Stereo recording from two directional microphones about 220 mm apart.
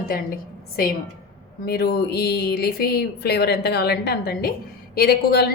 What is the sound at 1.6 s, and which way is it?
A woman's voice, 45° left (ahead or behind).